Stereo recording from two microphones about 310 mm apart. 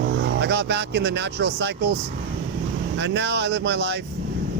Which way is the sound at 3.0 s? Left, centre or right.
Right.